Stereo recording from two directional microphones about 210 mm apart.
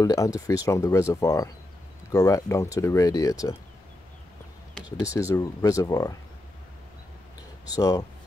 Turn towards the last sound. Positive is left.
turn(degrees=15)  # may be behind; listen again after turning